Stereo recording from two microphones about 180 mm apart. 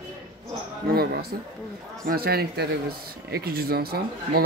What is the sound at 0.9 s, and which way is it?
Speech, 60° right (ahead or behind).